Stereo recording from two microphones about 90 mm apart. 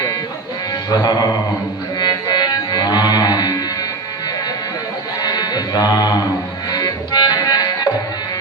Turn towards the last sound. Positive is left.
turn(degrees=45)  # may be behind; listen again after turning